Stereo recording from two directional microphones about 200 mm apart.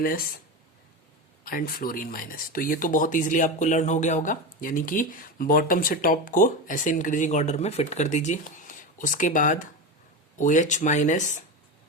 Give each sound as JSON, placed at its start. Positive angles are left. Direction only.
{"t": 1.5, "sound": "speech", "side_deg": 45}